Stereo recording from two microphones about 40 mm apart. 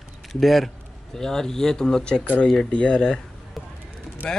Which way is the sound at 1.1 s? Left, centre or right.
Centre.